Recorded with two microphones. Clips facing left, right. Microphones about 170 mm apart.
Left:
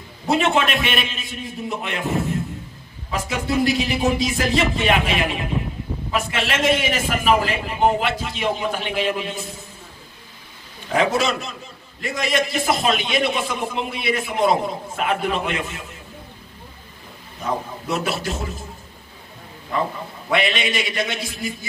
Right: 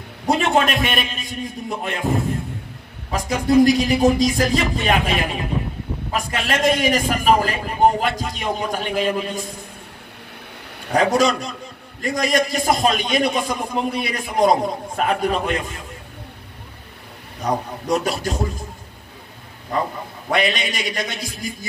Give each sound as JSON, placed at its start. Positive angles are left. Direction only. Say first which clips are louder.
{"t": 0.3, "sound": "a man's voice", "louder": "right 1 dB", "side_deg": -45}
{"t": 3.1, "sound": "a man's voice", "louder": "right 5 dB", "side_deg": -40}
{"t": 10.9, "sound": "a man's voice", "louder": "right 3 dB", "side_deg": -40}
{"t": 18.0, "sound": "a man's voice", "louder": "right 3 dB", "side_deg": -40}
{"t": 20.2, "sound": "a man's voice", "louder": "even", "side_deg": -45}